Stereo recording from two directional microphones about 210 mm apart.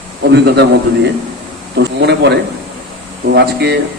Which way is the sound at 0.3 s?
50° right (ahead or behind).